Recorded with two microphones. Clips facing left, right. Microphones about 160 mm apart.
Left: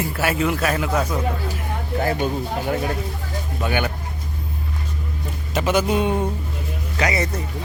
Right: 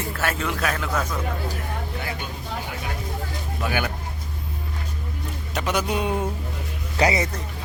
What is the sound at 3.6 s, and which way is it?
Speech, 5° right (ahead or behind).